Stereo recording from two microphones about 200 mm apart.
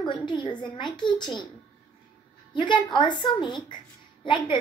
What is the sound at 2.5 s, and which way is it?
A woman's voice, 25° left (ahead or behind).